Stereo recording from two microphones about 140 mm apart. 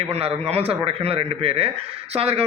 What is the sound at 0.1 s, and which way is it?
Speech, 45° right (ahead or behind).